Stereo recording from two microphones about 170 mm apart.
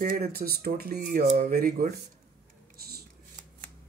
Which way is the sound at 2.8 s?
65° right (ahead or behind).